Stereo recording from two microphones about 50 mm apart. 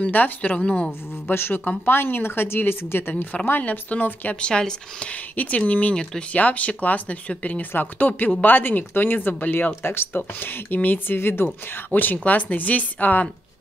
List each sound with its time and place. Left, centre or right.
0.1 s speech: left
1.2 s speech: left
3.9 s speech: left
4.4 s speech: centre
5.1 s speech: left
9.8 s speech: left
11.9 s speech: left